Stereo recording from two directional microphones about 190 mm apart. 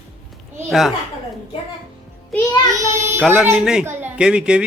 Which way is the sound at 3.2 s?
Centre (ahead or behind).